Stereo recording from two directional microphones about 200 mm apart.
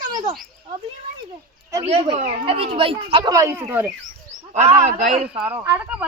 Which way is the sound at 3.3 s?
15° right (ahead or behind).